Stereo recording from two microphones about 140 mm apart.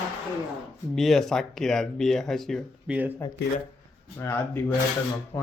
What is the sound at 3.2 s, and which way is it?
Speech, 20° left (ahead or behind).